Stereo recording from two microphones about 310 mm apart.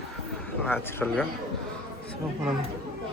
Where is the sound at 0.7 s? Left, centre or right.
Centre.